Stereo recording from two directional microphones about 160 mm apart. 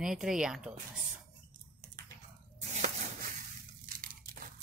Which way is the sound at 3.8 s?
55° right (ahead or behind).